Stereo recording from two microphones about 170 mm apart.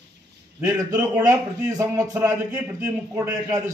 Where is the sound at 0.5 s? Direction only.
15° right (ahead or behind).